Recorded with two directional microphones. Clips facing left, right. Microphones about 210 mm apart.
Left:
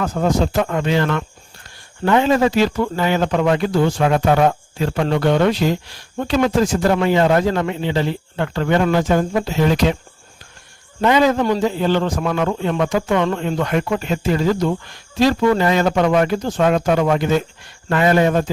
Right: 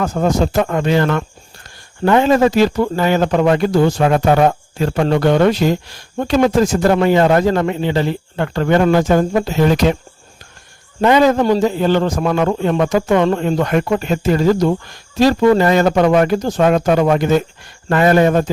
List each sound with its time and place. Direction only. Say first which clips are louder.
0.0 s a man's voice: right 2 dB; 45° right (ahead or behind)
11.0 s a man's voice: right 3 dB; 45° right (ahead or behind)